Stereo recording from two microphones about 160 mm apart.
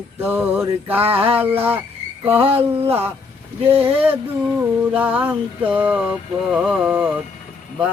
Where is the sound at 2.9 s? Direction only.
10° right (ahead or behind).